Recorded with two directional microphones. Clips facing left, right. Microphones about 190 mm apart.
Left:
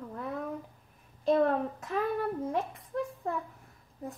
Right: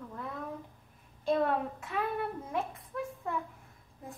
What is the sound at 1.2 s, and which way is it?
Speech, 40° left (ahead or behind).